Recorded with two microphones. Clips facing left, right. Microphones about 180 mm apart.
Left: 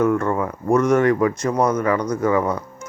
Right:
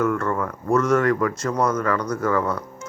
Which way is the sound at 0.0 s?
15° left (ahead or behind).